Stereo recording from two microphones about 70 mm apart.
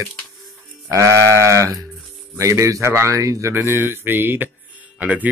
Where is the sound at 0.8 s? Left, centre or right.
Right.